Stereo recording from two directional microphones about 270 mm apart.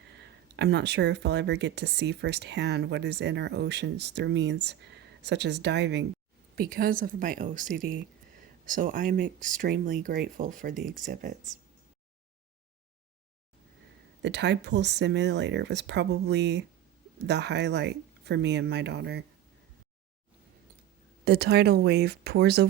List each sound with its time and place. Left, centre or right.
0.5 s speech: right
14.2 s speech: right
21.2 s speech: right